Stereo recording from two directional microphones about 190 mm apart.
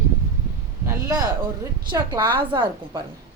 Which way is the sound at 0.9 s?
20° right (ahead or behind).